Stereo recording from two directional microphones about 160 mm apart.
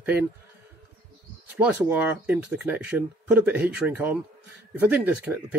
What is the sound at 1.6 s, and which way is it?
Speech, 10° right (ahead or behind).